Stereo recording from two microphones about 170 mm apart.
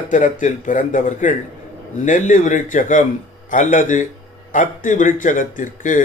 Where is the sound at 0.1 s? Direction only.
50° left (ahead or behind).